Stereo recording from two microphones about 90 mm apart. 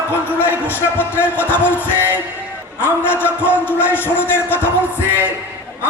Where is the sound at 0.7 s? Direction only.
25° left (ahead or behind).